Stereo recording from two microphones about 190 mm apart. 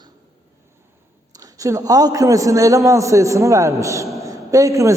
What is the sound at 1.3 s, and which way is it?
A man's voice, 20° right (ahead or behind).